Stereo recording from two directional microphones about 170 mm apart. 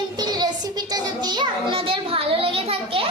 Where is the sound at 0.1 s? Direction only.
25° right (ahead or behind).